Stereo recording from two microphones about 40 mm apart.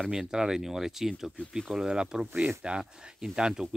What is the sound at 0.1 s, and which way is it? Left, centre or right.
Speech, centre.